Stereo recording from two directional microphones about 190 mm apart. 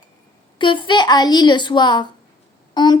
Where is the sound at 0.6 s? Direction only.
25° left (ahead or behind).